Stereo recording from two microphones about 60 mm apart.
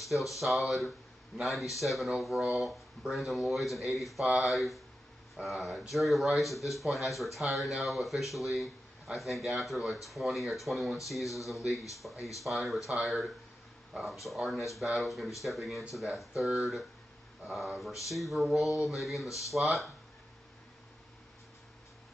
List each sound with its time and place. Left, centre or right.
0.4 s speech: centre
14.2 s speech: centre
19.2 s speech: left
19.5 s speech: centre